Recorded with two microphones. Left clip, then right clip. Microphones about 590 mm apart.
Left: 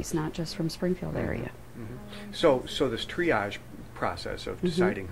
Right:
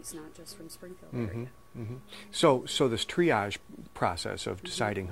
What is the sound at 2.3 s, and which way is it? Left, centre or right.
Speech, right.